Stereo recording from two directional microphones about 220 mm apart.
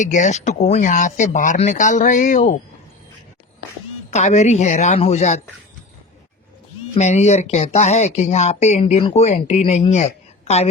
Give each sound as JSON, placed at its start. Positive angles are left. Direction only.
{"t": 0.0, "sound": "speech", "side_deg": 35}
{"t": 4.1, "sound": "speech", "side_deg": 30}
{"t": 6.9, "sound": "speech", "side_deg": 30}